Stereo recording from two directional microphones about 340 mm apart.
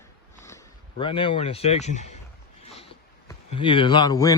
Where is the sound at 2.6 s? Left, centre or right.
Centre.